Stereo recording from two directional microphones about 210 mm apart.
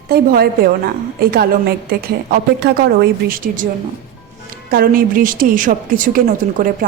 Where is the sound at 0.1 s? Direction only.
45° right (ahead or behind).